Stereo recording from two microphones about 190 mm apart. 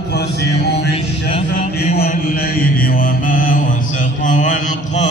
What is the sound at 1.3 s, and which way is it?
Music, 35° left (ahead or behind).